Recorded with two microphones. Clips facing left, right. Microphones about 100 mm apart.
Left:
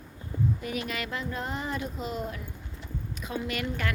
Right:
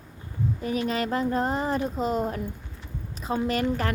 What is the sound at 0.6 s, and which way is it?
A woman's voice, 35° right (ahead or behind).